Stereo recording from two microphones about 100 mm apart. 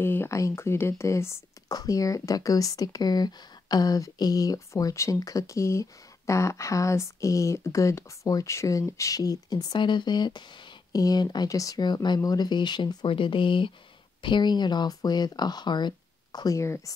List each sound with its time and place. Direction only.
0.0 s speech: 25° left (ahead or behind); by 13.1 s 45° left (ahead or behind)
13.1 s speech: 60° left (ahead or behind); by 16.9 s 30° left (ahead or behind)